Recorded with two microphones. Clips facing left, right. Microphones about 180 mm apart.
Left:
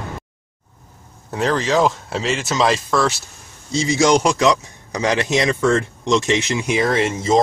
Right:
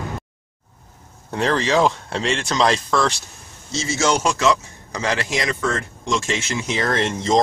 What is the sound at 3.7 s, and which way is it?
A man's voice, 15° left (ahead or behind).